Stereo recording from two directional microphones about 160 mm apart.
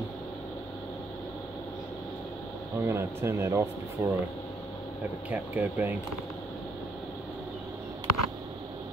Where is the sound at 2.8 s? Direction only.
15° right (ahead or behind).